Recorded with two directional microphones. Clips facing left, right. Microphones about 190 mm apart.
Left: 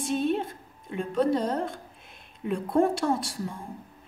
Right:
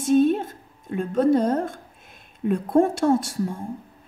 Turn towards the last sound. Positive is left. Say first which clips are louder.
# right 7 dB
turn(degrees=-45)  # may be behind; listen again after turning